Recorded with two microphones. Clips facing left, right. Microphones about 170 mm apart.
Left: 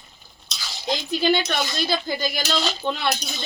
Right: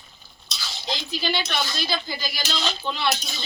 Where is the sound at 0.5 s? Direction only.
10° left (ahead or behind).